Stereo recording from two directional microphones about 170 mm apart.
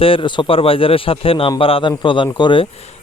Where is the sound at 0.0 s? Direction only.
30° left (ahead or behind).